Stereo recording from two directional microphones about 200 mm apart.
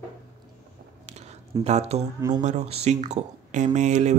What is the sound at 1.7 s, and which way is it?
Speech, 35° right (ahead or behind).